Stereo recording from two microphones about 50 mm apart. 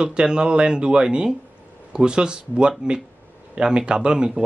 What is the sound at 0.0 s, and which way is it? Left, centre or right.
Speech, centre.